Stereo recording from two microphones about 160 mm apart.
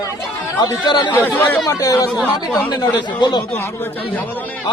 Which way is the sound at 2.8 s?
25° left (ahead or behind).